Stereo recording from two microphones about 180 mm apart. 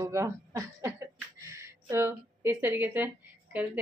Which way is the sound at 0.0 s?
15° right (ahead or behind).